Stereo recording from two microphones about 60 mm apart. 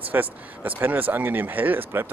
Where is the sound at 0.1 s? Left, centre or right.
Right.